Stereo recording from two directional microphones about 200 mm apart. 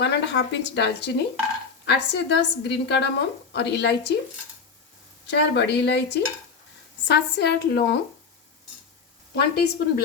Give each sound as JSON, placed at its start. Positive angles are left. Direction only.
{"t": 0.0, "sound": "a woman's voice", "side_deg": 60}
{"t": 5.3, "sound": "a woman's voice", "side_deg": 55}
{"t": 9.3, "sound": "a woman's voice", "side_deg": 55}